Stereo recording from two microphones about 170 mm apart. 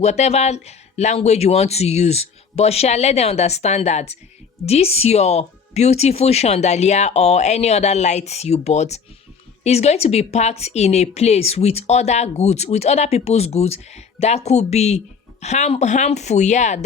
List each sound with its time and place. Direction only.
0.0 s a woman's voice: 40° left (ahead or behind)